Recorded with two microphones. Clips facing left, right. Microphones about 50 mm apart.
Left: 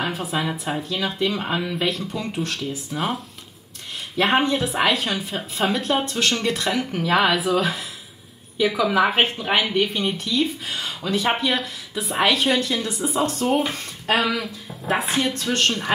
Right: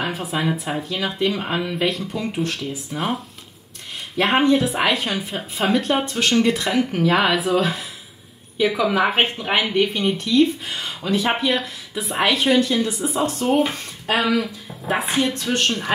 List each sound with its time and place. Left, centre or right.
0.0 s speech: centre
0.3 s speech: centre
1.1 s speech: centre
4.3 s speech: centre